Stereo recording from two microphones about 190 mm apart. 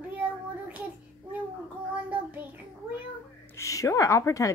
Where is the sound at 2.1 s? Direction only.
10° right (ahead or behind).